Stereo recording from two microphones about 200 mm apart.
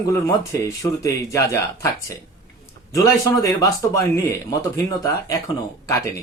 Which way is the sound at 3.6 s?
15° left (ahead or behind).